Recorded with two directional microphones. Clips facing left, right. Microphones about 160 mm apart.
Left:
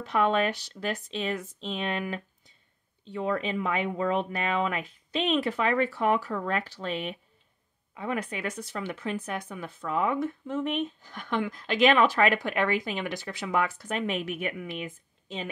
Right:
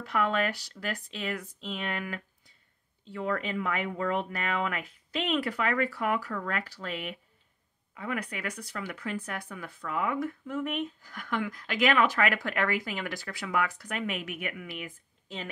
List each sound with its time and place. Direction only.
0.0 s speech: 20° left (ahead or behind)